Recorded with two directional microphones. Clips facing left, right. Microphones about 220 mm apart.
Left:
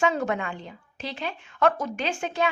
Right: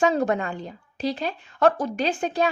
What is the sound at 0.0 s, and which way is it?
A woman's voice, 35° right (ahead or behind).